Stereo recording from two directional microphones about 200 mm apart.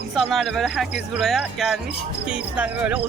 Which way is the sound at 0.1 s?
Centre (ahead or behind).